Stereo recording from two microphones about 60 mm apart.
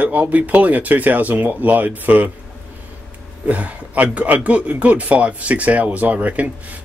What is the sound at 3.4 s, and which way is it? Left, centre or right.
Speech, right.